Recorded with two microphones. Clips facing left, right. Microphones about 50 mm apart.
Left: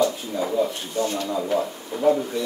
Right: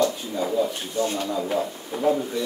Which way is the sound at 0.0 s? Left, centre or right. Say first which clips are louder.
Left 1 dB; centre.